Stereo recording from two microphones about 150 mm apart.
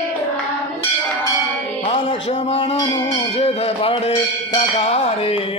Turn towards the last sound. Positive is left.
turn(degrees=45)  # may be behind; listen again after turning